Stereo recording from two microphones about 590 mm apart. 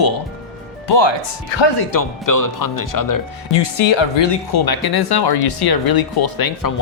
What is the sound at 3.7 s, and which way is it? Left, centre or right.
Speech, left.